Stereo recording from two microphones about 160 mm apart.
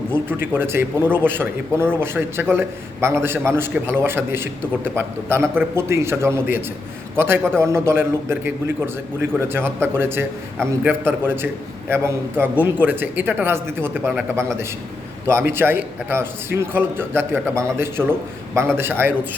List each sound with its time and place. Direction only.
0.1 s a man's voice: 15° right (ahead or behind)
7.6 s a man's voice: 15° right (ahead or behind)